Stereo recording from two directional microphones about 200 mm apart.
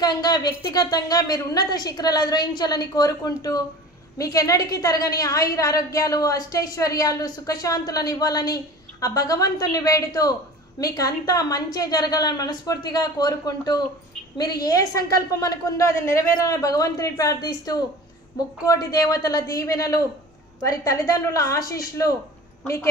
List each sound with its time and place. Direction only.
0.0 s a woman's voice: 20° left (ahead or behind)